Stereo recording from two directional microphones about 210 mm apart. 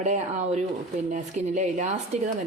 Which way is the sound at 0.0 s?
35° right (ahead or behind).